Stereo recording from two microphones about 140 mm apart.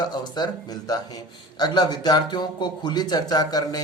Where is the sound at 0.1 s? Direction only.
30° left (ahead or behind).